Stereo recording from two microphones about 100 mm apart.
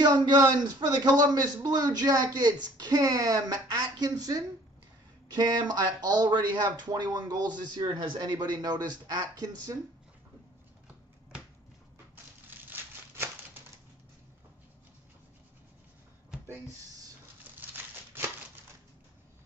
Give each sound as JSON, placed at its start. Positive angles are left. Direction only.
{"t": 0.0, "sound": "speech", "side_deg": -45}
{"t": 12.4, "sound": "crumpling", "side_deg": -20}